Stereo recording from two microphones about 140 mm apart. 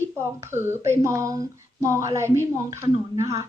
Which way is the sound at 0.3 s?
20° right (ahead or behind).